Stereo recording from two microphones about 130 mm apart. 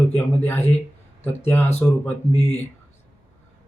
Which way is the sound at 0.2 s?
15° left (ahead or behind).